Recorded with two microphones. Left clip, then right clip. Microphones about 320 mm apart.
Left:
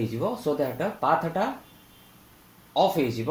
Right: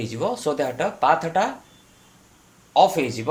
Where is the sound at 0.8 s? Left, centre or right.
Right.